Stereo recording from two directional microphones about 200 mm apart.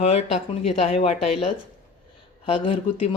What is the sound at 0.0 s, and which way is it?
Speech, 30° left (ahead or behind).